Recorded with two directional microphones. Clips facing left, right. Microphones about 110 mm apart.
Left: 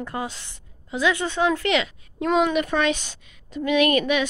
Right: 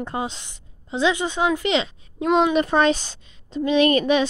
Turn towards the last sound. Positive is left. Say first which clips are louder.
# right 3 dB
turn(degrees=-30)  # may be behind; listen again after turning